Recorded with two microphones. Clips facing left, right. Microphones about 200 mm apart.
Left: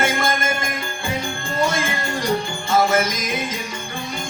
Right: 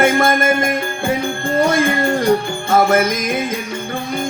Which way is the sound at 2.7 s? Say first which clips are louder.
Right 4 dB; 55° right (ahead or behind).